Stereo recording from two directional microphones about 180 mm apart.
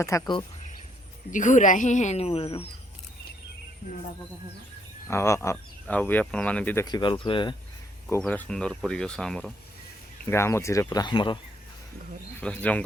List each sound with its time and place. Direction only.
0.1 s speech: 15° left (ahead or behind)
1.3 s a woman's voice: 45° left (ahead or behind)
5.0 s speech: 15° left (ahead or behind)
6.8 s speech: 25° left (ahead or behind)
8.0 s speech: 5° left (ahead or behind)
10.2 s speech: 15° left (ahead or behind)
12.4 s speech: 10° left (ahead or behind)